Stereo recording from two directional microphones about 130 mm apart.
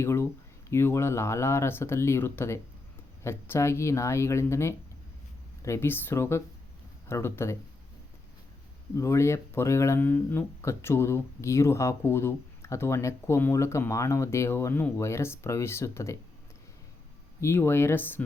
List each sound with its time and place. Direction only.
0.0 s speech: 20° left (ahead or behind)
9.0 s speech: 20° left (ahead or behind)
17.4 s speech: 20° left (ahead or behind)